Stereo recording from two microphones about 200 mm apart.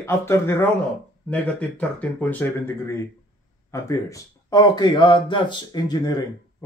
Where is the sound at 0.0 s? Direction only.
15° left (ahead or behind).